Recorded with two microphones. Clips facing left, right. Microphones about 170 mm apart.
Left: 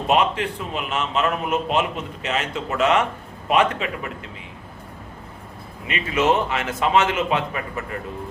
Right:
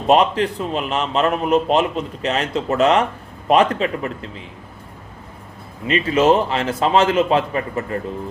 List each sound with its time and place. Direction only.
0.1 s a man's voice: 35° right (ahead or behind)
5.9 s a man's voice: 30° right (ahead or behind)